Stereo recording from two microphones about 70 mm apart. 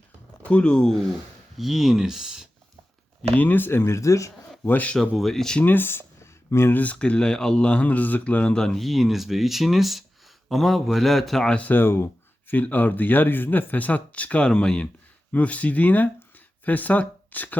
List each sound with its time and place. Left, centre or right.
0.4 s speech: centre
1.5 s speech: centre
3.3 s speech: left
4.6 s speech: left
4.9 s speech: centre
5.5 s speech: left
6.7 s speech: centre
8.5 s speech: centre
11.5 s speech: left